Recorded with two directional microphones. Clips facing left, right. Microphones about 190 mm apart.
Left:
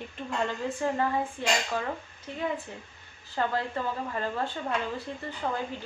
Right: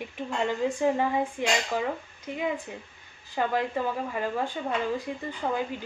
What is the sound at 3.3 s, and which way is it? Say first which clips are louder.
Speech: right 2 dB; 15° right (ahead or behind).